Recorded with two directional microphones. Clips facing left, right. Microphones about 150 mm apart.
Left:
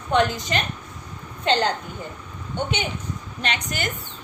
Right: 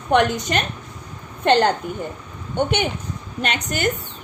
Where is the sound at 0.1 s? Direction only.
60° right (ahead or behind).